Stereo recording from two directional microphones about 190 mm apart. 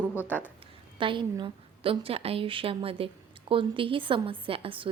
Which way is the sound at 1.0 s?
25° right (ahead or behind).